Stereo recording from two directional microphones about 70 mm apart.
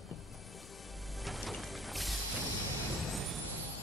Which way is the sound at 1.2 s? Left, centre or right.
Centre.